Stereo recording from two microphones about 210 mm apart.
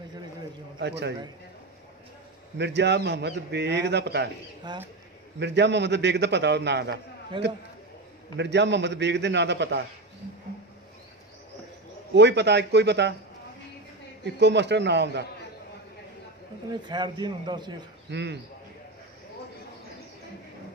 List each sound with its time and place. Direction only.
0.7 s speech: 55° right (ahead or behind)
2.5 s speech: 55° right (ahead or behind)
4.7 s a man's voice: 20° right (ahead or behind)
5.4 s a man's voice: 55° right (ahead or behind)
7.3 s a man's voice: 20° right (ahead or behind)
8.4 s a man's voice: 55° right (ahead or behind)
12.1 s speech: 55° right (ahead or behind)
14.2 s a man's voice: 55° right (ahead or behind)
16.8 s a man's voice: 20° right (ahead or behind)
18.1 s a man's voice: 55° right (ahead or behind)